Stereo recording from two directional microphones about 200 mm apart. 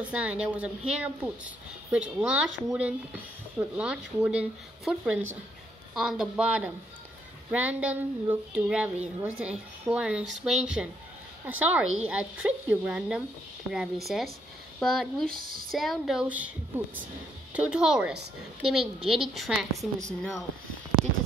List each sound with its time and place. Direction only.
0.0 s speech: 5° right (ahead or behind)
15.2 s a woman's voice: 45° right (ahead or behind)
15.7 s speech: centre (ahead or behind)